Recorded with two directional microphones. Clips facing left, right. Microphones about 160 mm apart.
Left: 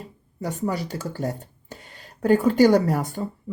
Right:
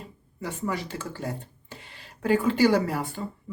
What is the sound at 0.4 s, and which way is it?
Speech, 40° left (ahead or behind).